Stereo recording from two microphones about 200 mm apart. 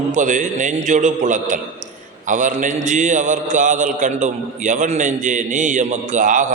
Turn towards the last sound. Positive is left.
turn(degrees=-40)  # may be behind; listen again after turning